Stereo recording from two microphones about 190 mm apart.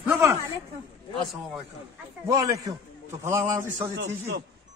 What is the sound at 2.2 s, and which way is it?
A man's voice, 20° right (ahead or behind).